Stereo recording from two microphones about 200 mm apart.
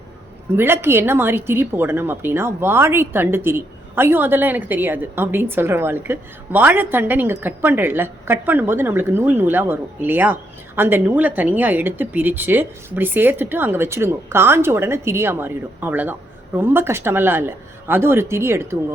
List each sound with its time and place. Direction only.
0.5 s a woman's voice: 10° right (ahead or behind)